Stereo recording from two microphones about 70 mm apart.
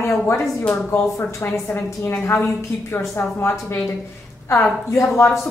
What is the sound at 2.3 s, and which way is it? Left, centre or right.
A woman's voice, left.